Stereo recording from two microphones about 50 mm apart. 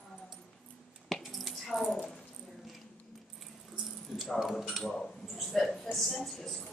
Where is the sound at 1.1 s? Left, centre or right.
Centre.